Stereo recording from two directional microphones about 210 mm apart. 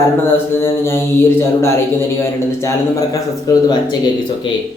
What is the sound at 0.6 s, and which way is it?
Speech, 10° left (ahead or behind).